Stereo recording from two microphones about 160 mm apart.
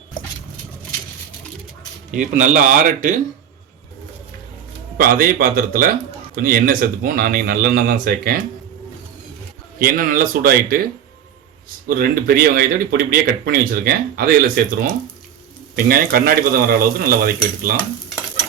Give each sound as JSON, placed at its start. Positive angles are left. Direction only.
{"t": 2.1, "sound": "speech", "side_deg": -50}
{"t": 4.9, "sound": "speech", "side_deg": -60}
{"t": 9.7, "sound": "speech", "side_deg": -60}
{"t": 11.9, "sound": "speech", "side_deg": -65}